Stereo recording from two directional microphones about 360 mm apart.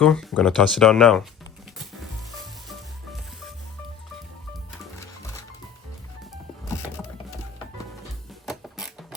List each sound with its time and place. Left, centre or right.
0.0 s speech: centre
8.4 s mechanisms: centre